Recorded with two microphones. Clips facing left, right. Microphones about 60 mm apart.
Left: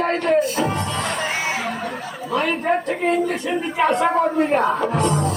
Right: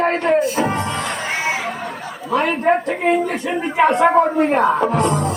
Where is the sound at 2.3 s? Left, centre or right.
Centre.